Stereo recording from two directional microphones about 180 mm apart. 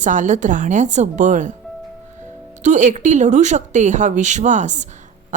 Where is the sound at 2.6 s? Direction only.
40° right (ahead or behind).